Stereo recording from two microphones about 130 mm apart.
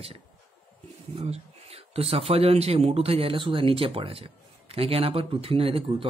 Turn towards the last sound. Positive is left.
turn(degrees=-45)  # may be behind; listen again after turning